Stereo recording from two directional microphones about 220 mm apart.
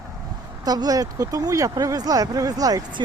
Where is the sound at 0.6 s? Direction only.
15° right (ahead or behind).